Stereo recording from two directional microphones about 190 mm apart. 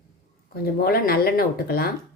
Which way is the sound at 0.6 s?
55° left (ahead or behind).